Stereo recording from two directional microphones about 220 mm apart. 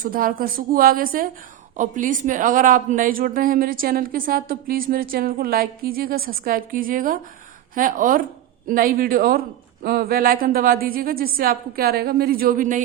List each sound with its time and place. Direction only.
0.0 s a man's voice: 40° right (ahead or behind)